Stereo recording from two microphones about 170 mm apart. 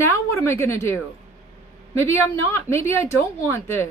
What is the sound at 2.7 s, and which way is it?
Speech, 15° left (ahead or behind).